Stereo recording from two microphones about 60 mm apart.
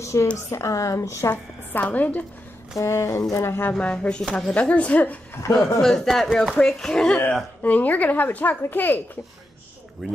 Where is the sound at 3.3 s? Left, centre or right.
Left.